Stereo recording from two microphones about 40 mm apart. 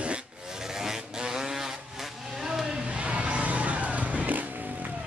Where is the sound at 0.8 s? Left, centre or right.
Centre.